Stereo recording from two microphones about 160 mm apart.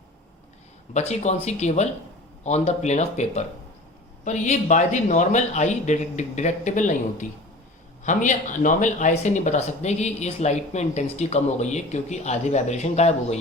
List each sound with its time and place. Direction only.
0.9 s speech: 45° left (ahead or behind)